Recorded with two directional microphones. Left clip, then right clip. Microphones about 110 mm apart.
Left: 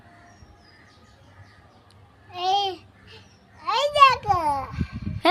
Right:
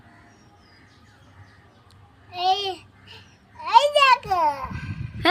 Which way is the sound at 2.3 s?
30° left (ahead or behind).